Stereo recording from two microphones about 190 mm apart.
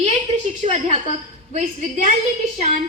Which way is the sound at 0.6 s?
35° right (ahead or behind).